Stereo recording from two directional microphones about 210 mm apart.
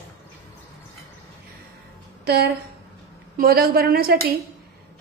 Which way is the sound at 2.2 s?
45° right (ahead or behind).